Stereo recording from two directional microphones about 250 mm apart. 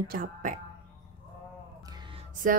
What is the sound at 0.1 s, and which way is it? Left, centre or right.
Speech, right.